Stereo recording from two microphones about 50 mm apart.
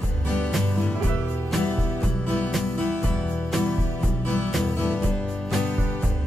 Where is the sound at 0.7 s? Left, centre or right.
Left.